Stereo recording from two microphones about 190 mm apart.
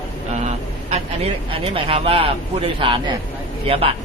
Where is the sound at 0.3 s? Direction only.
35° right (ahead or behind).